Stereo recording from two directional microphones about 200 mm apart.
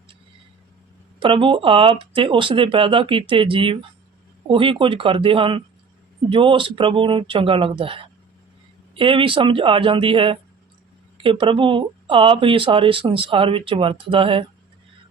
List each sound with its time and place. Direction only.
1.2 s speech: 25° right (ahead or behind)